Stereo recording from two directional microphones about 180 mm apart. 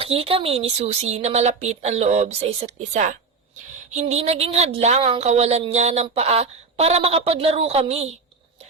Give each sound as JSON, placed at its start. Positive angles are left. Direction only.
{"t": 0.0, "sound": "speech", "side_deg": -30}